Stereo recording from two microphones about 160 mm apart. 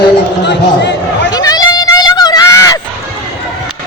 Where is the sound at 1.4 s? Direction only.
25° left (ahead or behind).